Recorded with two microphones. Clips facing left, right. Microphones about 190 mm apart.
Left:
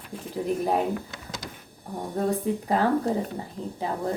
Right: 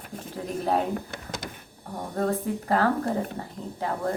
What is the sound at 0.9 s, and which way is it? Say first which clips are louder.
Speech: right 1 dB; 55° right (ahead or behind).